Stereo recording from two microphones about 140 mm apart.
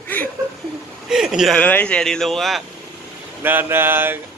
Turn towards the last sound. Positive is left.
turn(degrees=-15)  # may be behind; listen again after turning